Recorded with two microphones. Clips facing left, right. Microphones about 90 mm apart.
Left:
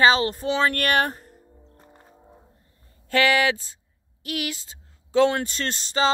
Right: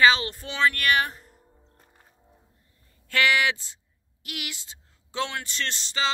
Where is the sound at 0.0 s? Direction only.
35° left (ahead or behind).